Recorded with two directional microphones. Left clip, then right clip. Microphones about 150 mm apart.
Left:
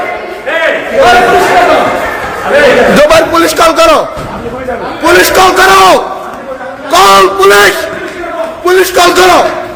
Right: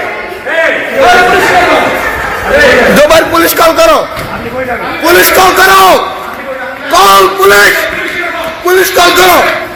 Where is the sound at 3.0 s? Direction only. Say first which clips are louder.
Even; 5° left (ahead or behind).